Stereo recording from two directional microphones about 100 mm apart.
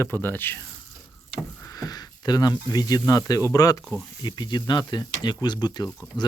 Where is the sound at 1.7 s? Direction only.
40° left (ahead or behind).